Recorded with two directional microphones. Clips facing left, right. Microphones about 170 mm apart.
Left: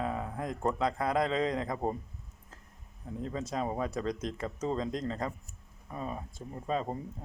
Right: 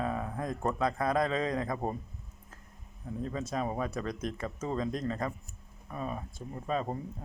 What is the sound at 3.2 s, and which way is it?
Speech, 20° left (ahead or behind).